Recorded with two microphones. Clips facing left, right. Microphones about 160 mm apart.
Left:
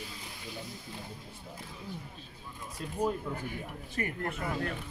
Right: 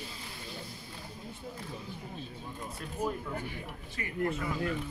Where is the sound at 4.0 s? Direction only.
45° left (ahead or behind).